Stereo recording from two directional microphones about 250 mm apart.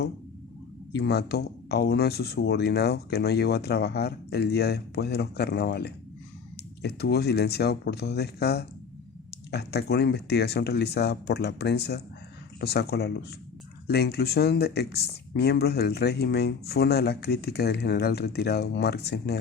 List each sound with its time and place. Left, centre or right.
0.9 s speech: left